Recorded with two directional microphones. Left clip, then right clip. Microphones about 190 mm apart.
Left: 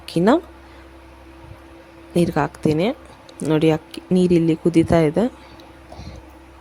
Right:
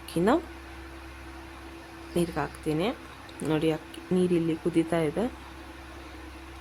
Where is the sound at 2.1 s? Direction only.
50° left (ahead or behind).